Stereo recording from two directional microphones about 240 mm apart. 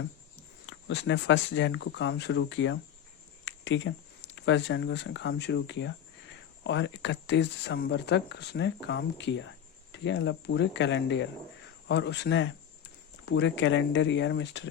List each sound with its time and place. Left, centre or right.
0.7 s speech: left